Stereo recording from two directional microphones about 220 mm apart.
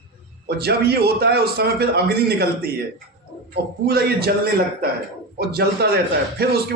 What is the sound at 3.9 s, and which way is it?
Speech, 45° right (ahead or behind).